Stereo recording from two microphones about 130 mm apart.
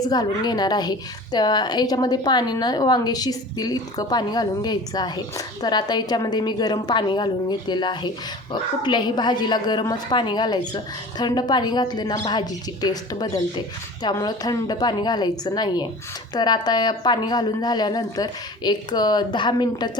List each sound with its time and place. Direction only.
0.0 s a woman's voice: 30° left (ahead or behind)